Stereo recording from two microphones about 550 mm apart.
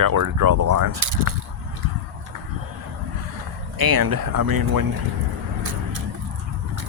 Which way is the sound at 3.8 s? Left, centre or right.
Right.